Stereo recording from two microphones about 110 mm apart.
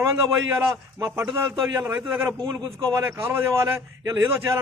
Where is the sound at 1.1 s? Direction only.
25° right (ahead or behind).